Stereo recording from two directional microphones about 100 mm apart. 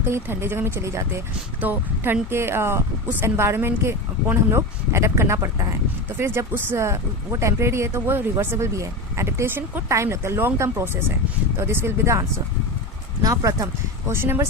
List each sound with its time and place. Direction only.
0.1 s speech: 25° right (ahead or behind)
13.2 s speech: 30° right (ahead or behind)